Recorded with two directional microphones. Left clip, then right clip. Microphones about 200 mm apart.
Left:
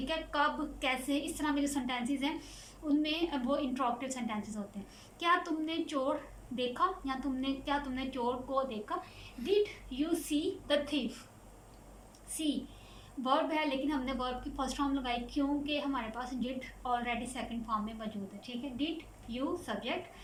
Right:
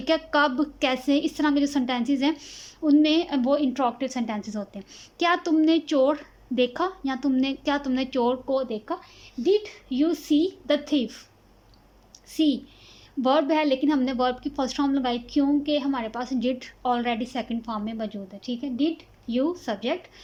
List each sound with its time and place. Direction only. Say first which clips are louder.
0.0 s a woman's voice: right 10 dB; 50° right (ahead or behind)
9.9 s a woman's voice: right 11 dB; 45° right (ahead or behind)
12.4 s a woman's voice: right 11 dB; 50° right (ahead or behind)